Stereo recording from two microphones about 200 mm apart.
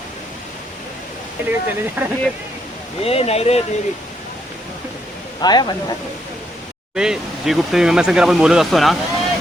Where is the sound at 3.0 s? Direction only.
30° left (ahead or behind).